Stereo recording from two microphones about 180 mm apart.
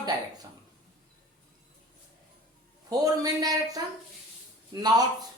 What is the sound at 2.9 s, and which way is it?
Speech, 20° right (ahead or behind).